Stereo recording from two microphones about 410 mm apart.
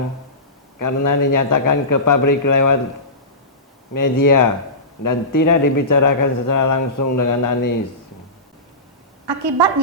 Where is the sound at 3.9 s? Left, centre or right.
Left.